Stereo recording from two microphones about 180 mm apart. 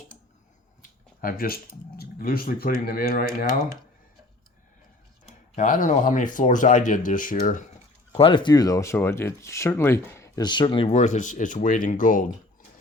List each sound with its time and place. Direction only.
0.8 s a sound: 50° left (ahead or behind)
2.0 s speech: 55° left (ahead or behind)
5.5 s speech: 45° left (ahead or behind)
8.1 s speech: 30° left (ahead or behind); by 12.2 s 50° left (ahead or behind)